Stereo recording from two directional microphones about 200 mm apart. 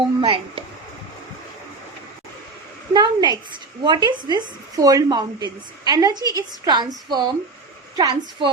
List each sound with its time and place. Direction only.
0.2 s a woman's voice: 25° right (ahead or behind)
2.9 s a woman's voice: 20° right (ahead or behind)